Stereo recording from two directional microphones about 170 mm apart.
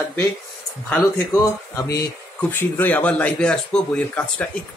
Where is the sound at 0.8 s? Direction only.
15° left (ahead or behind).